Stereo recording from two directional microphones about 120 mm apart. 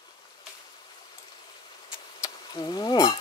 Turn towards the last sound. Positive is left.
turn(degrees=35)  # may be behind; listen again after turning